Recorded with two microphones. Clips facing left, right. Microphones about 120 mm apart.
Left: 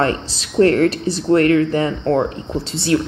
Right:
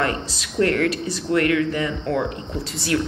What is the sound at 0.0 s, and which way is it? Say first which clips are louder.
A woman's voice: left 5 dB; 30° left (ahead or behind).